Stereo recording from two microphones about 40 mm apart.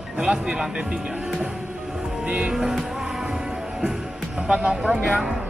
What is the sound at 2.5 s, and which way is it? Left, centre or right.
Speech, centre.